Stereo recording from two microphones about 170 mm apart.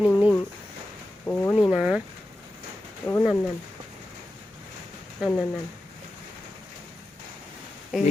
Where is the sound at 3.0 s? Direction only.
10° left (ahead or behind).